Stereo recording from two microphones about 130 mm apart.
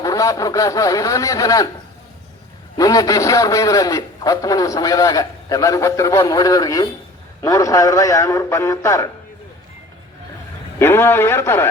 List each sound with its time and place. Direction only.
0.0 s a man's voice: 25° left (ahead or behind)
2.7 s a man's voice: 25° left (ahead or behind)
10.8 s a man's voice: 20° left (ahead or behind)